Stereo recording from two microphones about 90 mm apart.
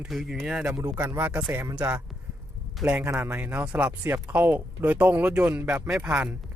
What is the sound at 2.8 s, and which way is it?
Speech, centre (ahead or behind).